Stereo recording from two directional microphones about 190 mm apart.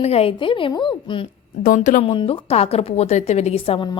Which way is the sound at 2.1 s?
30° left (ahead or behind).